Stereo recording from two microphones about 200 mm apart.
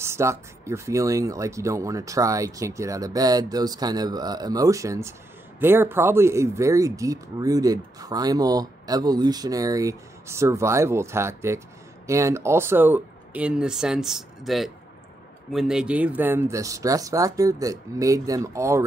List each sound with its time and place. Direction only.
0.0 s speech: 15° right (ahead or behind)